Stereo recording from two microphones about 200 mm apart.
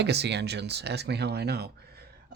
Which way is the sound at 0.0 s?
55° right (ahead or behind).